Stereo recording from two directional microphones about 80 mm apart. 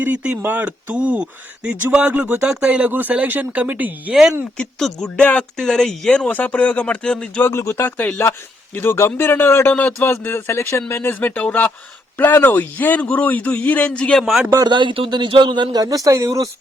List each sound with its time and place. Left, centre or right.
0.0 s speech: centre
4.5 s speech: centre
6.1 s speech: centre
7.4 s a man's voice: left; by 14.3 s centre
14.3 s a man's voice: centre
14.6 s a man's voice: right